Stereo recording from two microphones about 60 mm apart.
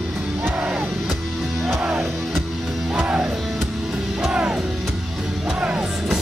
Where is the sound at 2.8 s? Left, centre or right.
Right.